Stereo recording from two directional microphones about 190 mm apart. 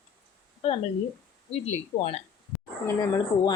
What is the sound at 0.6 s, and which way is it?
Speech, 30° left (ahead or behind).